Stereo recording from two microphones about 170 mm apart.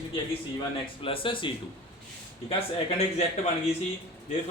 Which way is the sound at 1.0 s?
30° left (ahead or behind).